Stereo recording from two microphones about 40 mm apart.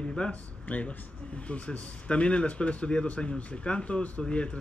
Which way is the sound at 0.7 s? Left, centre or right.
Left.